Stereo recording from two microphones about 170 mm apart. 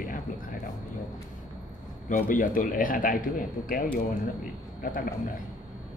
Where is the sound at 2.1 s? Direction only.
50° left (ahead or behind).